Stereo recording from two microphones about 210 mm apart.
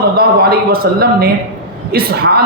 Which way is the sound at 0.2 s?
50° right (ahead or behind).